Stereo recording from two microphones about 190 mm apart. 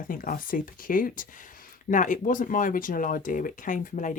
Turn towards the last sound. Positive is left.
turn(degrees=45)  # may be behind; listen again after turning